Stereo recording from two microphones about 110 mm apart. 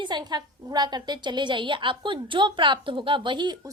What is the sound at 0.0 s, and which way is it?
A woman's voice, 40° right (ahead or behind).